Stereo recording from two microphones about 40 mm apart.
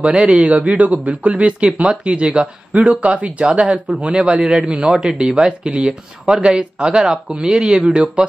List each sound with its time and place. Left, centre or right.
0.0 s speech: right
2.7 s speech: right